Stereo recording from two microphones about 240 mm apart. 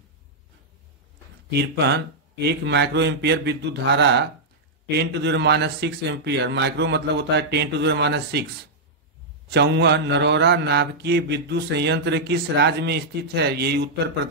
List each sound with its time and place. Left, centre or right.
1.6 s mantra: right
9.5 s mantra: right